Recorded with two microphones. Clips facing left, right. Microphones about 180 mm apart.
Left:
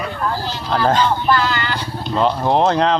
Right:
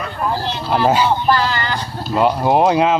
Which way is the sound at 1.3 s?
35° right (ahead or behind).